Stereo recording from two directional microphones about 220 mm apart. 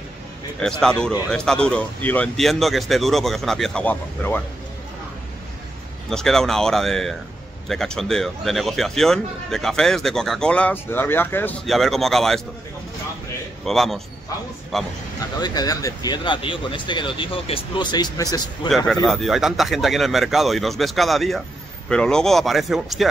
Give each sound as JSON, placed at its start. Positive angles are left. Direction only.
{"t": 0.6, "sound": "a man's voice", "side_deg": 5}
{"t": 6.0, "sound": "a man's voice", "side_deg": 0}
{"t": 13.7, "sound": "a man's voice", "side_deg": 0}
{"t": 15.3, "sound": "speech", "side_deg": 15}
{"t": 19.0, "sound": "a man's voice", "side_deg": 0}